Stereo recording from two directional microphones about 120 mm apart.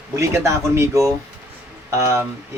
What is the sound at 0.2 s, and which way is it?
Speech, 20° right (ahead or behind).